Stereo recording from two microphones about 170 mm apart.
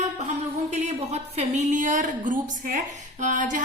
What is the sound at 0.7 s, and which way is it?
A woman's voice, 40° right (ahead or behind).